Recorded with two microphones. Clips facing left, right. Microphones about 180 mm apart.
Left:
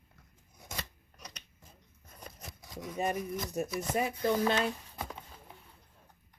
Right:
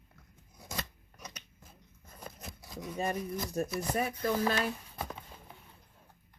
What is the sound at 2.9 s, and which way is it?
Speech, 15° left (ahead or behind).